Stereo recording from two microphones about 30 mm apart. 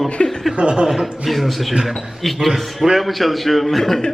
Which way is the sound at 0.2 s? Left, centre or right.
Left.